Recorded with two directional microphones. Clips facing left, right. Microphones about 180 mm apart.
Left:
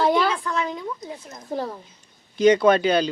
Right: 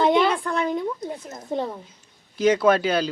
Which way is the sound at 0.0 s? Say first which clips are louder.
Right 1 dB; 20° right (ahead or behind).